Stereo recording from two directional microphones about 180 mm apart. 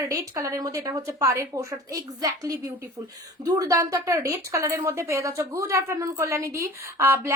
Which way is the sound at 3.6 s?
20° right (ahead or behind).